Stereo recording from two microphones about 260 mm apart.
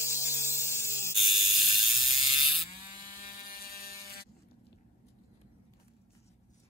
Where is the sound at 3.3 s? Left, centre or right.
Left.